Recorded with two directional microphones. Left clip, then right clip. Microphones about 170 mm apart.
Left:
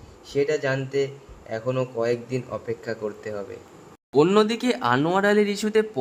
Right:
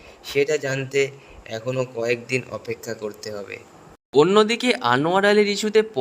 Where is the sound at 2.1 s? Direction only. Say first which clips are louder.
Right 4 dB; 70° right (ahead or behind).